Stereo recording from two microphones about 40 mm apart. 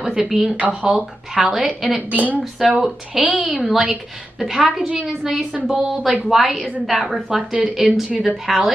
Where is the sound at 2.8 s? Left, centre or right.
Centre.